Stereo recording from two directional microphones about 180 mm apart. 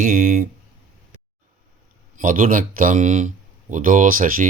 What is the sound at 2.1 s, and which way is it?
Speech, 50° right (ahead or behind).